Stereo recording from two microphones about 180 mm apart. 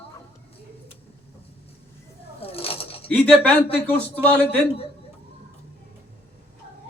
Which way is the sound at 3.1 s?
10° left (ahead or behind).